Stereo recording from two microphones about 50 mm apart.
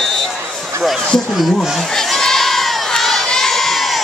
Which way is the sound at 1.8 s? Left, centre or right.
Centre.